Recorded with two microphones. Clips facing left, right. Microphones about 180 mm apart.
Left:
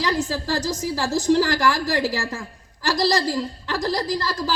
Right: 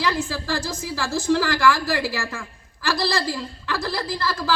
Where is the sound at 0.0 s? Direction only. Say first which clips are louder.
Left 1 dB; 35° left (ahead or behind).